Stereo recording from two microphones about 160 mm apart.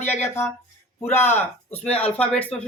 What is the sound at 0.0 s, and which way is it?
Speech, 15° left (ahead or behind).